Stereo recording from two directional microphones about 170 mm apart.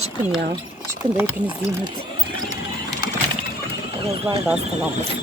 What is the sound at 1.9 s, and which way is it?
Sewing machine, 25° right (ahead or behind).